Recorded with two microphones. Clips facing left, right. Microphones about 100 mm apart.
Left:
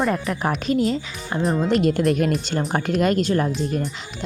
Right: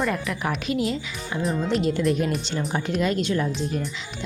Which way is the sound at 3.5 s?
Centre (ahead or behind).